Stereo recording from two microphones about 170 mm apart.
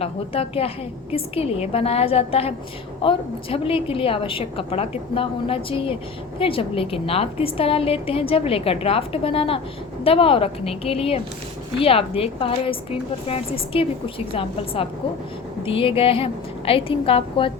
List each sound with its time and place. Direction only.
0.0 s a woman's voice: 35° left (ahead or behind)